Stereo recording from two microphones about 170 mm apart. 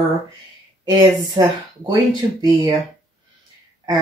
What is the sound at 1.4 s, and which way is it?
Speech, 20° right (ahead or behind).